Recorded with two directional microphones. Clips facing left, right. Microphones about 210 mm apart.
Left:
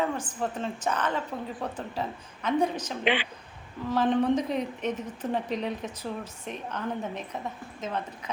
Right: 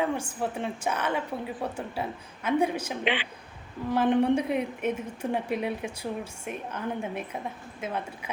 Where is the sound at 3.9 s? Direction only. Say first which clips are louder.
Right 1 dB; 10° right (ahead or behind).